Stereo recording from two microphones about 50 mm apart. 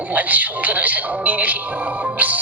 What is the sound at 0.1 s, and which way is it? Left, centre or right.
Speech, right.